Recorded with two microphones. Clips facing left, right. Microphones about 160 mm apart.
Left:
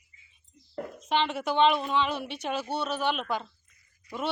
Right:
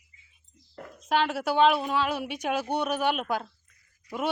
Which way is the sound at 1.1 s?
5° right (ahead or behind).